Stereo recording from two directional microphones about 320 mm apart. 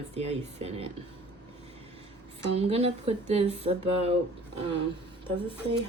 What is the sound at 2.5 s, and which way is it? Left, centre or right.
Speech, centre.